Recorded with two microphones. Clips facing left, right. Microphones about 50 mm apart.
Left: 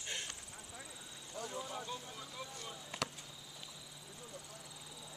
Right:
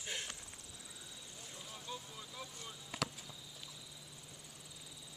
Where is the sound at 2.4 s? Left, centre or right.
Centre.